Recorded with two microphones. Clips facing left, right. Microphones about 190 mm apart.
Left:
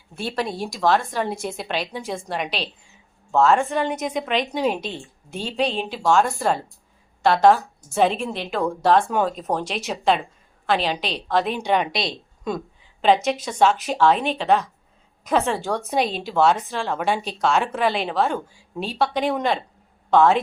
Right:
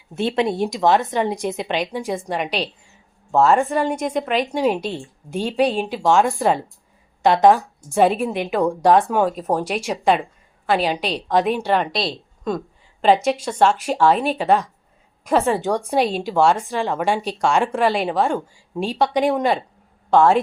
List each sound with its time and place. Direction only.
0.2 s a woman's voice: 20° right (ahead or behind)
3.4 s a woman's voice: centre (ahead or behind)
7.9 s a woman's voice: 5° right (ahead or behind)
8.5 s a woman's voice: 15° right (ahead or behind)
15.6 s a woman's voice: 10° right (ahead or behind)